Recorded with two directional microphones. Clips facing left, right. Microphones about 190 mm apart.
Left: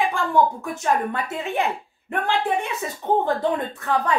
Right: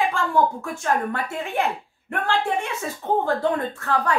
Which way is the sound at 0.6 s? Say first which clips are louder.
Left 1 dB; 20° left (ahead or behind).